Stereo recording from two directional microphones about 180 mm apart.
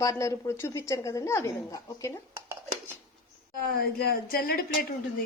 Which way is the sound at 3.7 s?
55° left (ahead or behind).